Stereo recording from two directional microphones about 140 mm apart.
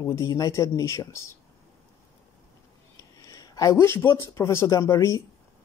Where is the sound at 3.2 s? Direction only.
25° left (ahead or behind).